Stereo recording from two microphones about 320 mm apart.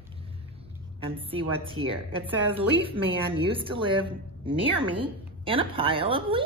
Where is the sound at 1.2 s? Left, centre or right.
Centre.